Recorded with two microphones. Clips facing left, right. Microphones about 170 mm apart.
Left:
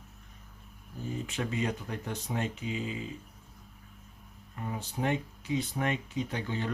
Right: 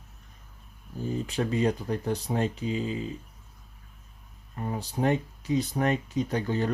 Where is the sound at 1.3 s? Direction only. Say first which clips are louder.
Right 7 dB; 35° right (ahead or behind).